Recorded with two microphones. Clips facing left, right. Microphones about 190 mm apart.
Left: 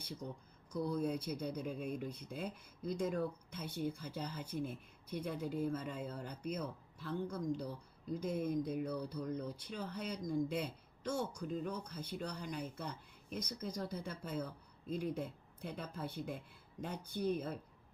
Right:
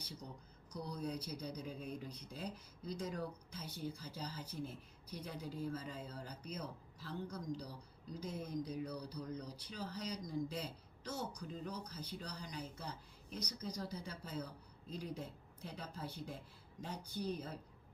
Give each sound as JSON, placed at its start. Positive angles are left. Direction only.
{"t": 0.7, "sound": "speech", "side_deg": 50}